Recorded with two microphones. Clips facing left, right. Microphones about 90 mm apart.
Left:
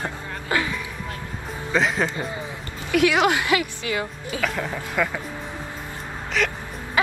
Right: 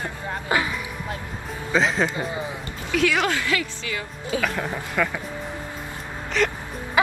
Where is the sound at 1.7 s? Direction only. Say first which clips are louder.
Right 1 dB; centre (ahead or behind).